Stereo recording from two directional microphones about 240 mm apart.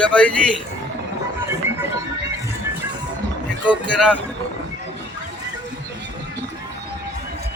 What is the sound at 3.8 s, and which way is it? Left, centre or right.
Speech, centre.